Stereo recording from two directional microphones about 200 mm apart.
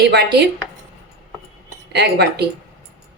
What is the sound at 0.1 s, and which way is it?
Speech, 55° right (ahead or behind).